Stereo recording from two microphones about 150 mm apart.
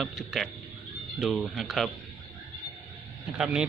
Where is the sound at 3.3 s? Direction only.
5° right (ahead or behind).